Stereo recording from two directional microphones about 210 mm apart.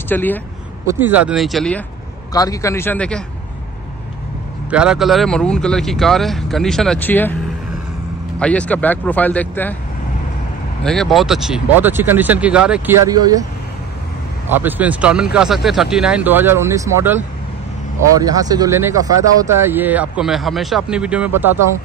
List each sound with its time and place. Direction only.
0.1 s speech: 10° left (ahead or behind)
0.9 s speech: 10° right (ahead or behind)
2.3 s speech: 15° left (ahead or behind)
4.6 s speech: 5° right (ahead or behind)
8.4 s speech: 5° left (ahead or behind)
10.8 s speech: centre (ahead or behind)
13.0 s speech: 15° right (ahead or behind)
14.5 s speech: 10° right (ahead or behind)